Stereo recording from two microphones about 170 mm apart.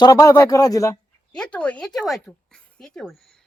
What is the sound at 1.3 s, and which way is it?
Speech, 5° left (ahead or behind).